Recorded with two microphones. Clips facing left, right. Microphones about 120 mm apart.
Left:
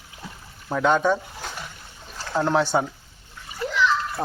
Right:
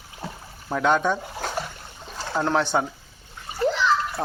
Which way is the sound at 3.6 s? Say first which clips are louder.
Right 2 dB; 35° right (ahead or behind).